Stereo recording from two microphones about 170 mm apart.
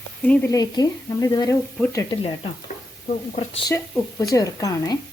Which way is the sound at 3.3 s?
35° left (ahead or behind).